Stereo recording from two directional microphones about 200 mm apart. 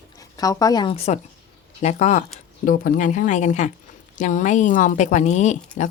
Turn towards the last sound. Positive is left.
turn(degrees=40)  # may be behind; listen again after turning